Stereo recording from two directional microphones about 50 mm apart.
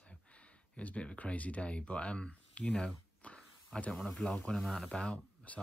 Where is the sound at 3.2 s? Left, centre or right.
Left.